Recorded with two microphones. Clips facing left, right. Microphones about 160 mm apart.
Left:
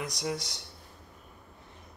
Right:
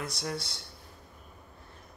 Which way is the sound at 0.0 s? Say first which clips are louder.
Left 2 dB; 15° left (ahead or behind).